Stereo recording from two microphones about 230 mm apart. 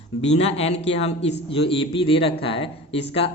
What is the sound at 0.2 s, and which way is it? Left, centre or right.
A man's voice, left.